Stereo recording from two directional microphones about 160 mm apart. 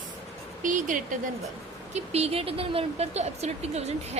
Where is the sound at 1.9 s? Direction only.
40° right (ahead or behind).